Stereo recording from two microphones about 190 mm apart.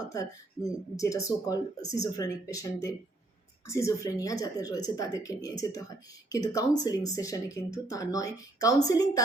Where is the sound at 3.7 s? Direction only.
15° left (ahead or behind).